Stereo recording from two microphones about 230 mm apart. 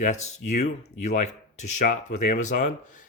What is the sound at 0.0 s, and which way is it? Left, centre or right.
Speech, left.